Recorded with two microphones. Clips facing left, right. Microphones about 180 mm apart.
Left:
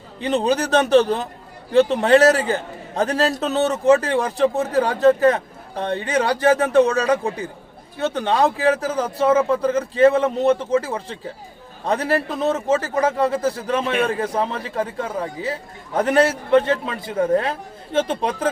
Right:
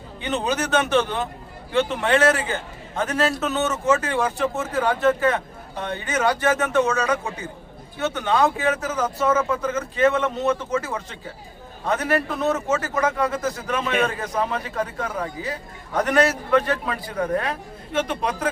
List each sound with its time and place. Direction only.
0.2 s a man's voice: 35° left (ahead or behind)